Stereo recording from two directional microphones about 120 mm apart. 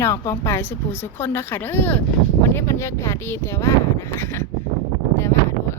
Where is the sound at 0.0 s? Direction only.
25° left (ahead or behind).